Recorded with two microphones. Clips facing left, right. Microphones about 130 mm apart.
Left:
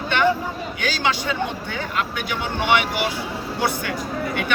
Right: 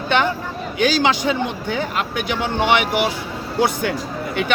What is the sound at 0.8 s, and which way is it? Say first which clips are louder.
Speech: right 7 dB; 20° right (ahead or behind).